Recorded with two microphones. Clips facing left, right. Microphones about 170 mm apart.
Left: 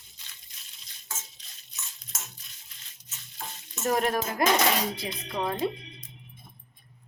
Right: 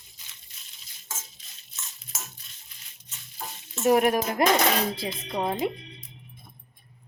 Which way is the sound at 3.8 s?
10° right (ahead or behind).